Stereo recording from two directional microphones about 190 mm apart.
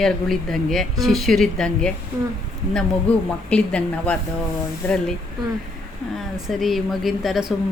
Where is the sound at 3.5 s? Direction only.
5° left (ahead or behind).